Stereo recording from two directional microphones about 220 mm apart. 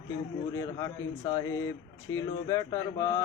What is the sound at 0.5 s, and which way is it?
Speech, 15° left (ahead or behind).